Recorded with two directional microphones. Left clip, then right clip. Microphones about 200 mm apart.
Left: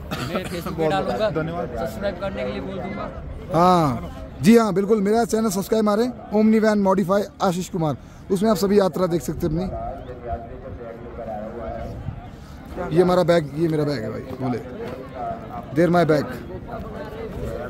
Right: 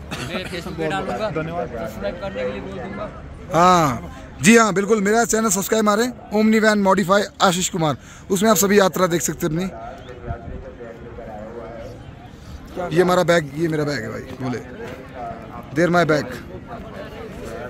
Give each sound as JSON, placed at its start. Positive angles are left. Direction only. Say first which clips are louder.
{"t": 0.1, "sound": "speech", "louder": "even", "side_deg": 60}
{"t": 1.3, "sound": "speech", "louder": "even", "side_deg": -25}
{"t": 2.0, "sound": "a man's voice", "louder": "right 3 dB", "side_deg": 5}
{"t": 12.9, "sound": "a man's voice", "louder": "right 1 dB", "side_deg": 0}
{"t": 15.7, "sound": "a man's voice", "louder": "right 1 dB", "side_deg": 5}